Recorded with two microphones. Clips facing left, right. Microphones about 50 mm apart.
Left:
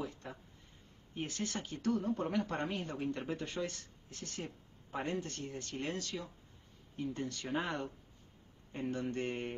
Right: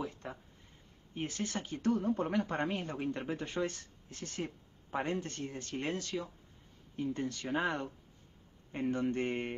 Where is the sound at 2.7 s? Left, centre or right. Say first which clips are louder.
Right 2 dB; right.